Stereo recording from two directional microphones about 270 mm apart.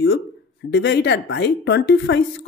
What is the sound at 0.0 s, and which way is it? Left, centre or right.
Speech, left.